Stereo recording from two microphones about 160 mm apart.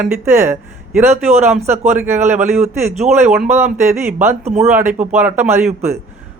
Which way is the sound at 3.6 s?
45° right (ahead or behind).